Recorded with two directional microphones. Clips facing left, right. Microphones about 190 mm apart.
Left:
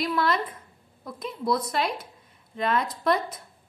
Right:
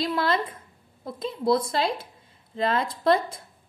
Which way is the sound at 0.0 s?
25° right (ahead or behind).